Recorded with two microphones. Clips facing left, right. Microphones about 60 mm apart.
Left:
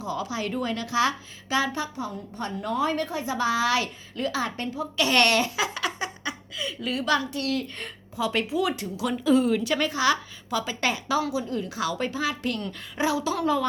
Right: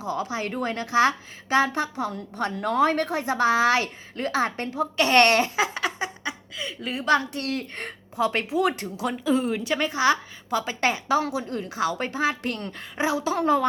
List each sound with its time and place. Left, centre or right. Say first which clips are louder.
0.0 s a woman's voice: right 1 dB; right
9.0 s a woman's voice: left 2 dB; right